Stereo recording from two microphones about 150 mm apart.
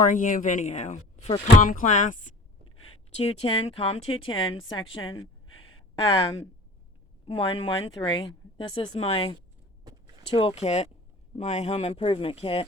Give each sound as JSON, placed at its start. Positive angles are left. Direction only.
{"t": 0.0, "sound": "speech", "side_deg": 60}
{"t": 2.8, "sound": "speech", "side_deg": 40}
{"t": 7.3, "sound": "speech", "side_deg": 35}
{"t": 10.3, "sound": "speech", "side_deg": 40}